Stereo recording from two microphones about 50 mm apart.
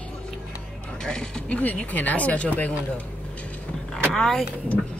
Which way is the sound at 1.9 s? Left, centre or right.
Left.